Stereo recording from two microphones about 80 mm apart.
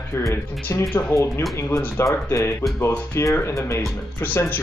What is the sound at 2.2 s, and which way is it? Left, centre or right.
Speech, left.